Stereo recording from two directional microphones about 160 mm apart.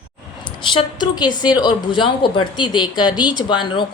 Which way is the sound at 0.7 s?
30° left (ahead or behind).